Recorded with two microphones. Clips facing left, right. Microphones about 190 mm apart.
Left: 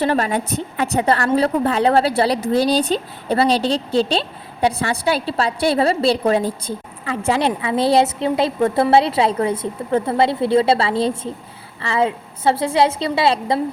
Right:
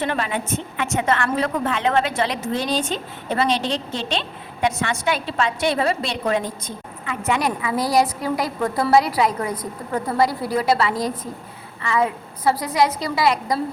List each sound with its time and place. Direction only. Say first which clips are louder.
0.0 s a woman's voice: left 5 dB; 40° left (ahead or behind)